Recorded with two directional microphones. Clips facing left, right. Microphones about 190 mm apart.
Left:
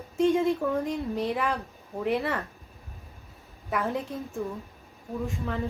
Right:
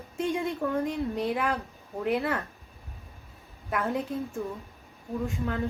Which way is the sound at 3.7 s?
Centre (ahead or behind).